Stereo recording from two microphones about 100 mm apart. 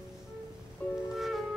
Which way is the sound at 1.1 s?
Centre (ahead or behind).